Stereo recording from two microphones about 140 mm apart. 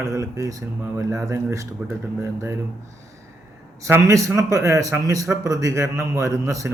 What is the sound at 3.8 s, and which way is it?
Speech, 20° right (ahead or behind).